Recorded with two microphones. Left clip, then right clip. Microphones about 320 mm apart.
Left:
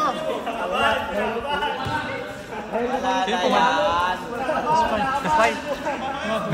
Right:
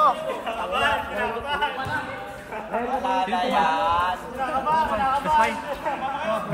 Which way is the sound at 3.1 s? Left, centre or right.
Right.